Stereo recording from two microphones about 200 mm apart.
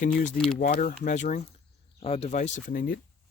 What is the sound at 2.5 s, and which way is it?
Speech, 45° left (ahead or behind).